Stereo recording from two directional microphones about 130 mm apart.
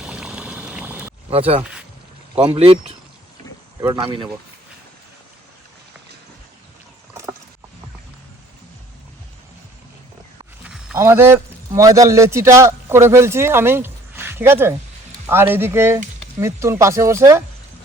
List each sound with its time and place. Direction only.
0.0 s a sound: 5° right (ahead or behind)
1.3 s speech: 50° right (ahead or behind)
3.9 s speech: 40° right (ahead or behind)
7.1 s vehicle: 20° right (ahead or behind)
10.6 s a sound: 5° right (ahead or behind)
10.9 s a man's voice: 20° right (ahead or behind)